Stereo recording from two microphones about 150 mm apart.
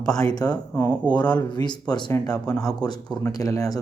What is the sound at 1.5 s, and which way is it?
Speech, 30° left (ahead or behind).